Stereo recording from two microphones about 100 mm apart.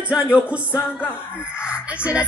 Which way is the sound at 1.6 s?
10° right (ahead or behind).